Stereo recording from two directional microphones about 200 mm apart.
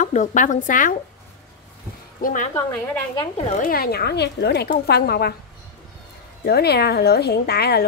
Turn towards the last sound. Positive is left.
turn(degrees=55)  # may be behind; listen again after turning